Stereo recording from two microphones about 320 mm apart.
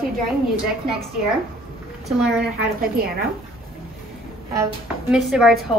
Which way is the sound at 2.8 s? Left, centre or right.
Right.